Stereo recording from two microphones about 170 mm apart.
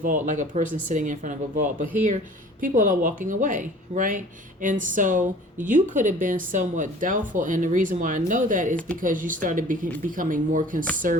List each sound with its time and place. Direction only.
0.0 s speech: 50° right (ahead or behind)